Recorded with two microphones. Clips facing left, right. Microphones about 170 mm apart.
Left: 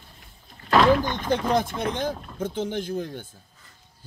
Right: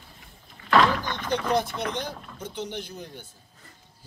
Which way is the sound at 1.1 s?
50° left (ahead or behind).